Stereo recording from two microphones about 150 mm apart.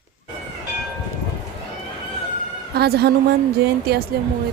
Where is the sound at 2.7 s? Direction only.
90° right.